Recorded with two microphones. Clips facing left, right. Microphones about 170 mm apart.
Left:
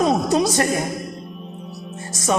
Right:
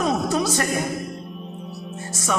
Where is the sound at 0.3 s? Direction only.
25° left (ahead or behind).